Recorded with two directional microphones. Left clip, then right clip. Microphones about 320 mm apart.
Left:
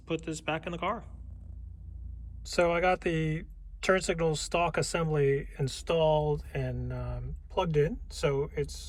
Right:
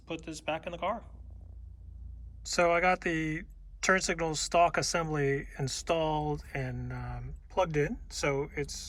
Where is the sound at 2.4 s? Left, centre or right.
Centre.